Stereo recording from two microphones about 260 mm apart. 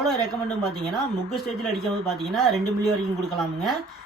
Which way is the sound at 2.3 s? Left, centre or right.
Centre.